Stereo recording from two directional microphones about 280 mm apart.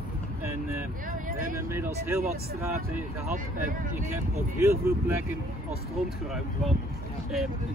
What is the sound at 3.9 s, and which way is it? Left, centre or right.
Speech, centre.